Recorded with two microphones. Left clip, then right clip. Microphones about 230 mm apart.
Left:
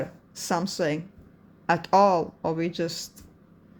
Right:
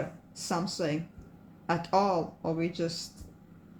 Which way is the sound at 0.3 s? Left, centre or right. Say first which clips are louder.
Left 6 dB; left.